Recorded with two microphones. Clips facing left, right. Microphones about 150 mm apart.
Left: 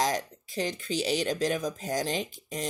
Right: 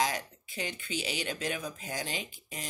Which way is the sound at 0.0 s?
40° left (ahead or behind).